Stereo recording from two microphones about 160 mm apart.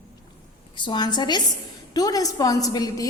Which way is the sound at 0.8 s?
25° left (ahead or behind).